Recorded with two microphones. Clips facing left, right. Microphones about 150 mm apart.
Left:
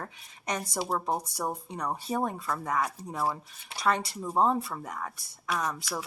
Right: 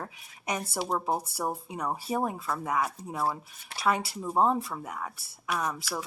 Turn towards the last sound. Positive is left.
turn(degrees=-5)  # may be behind; listen again after turning